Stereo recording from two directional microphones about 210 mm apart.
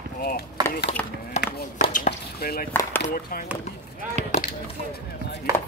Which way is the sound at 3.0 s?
45° left (ahead or behind).